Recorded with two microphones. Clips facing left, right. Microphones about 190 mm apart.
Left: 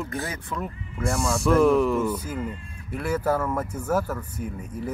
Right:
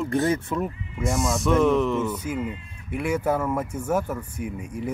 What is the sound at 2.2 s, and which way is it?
Speech, 10° right (ahead or behind).